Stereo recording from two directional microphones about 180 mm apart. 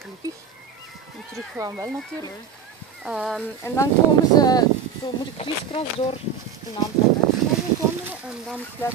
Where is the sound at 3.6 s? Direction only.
15° left (ahead or behind).